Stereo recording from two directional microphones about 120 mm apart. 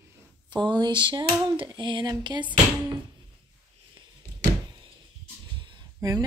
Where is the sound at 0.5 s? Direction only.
40° right (ahead or behind).